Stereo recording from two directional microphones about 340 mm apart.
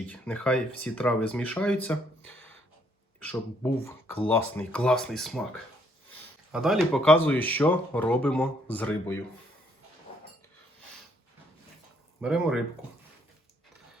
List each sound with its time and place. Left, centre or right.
0.1 s speech: centre
6.5 s speech: centre
12.2 s speech: centre